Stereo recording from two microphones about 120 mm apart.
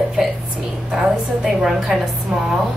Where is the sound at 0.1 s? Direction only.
5° right (ahead or behind).